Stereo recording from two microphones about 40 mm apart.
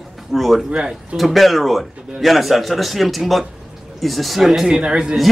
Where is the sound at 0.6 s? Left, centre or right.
Right.